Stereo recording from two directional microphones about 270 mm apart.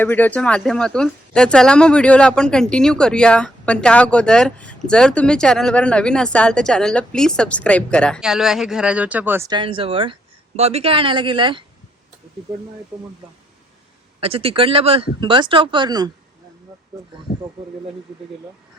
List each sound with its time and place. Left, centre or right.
0.0 s speech: centre
14.2 s speech: right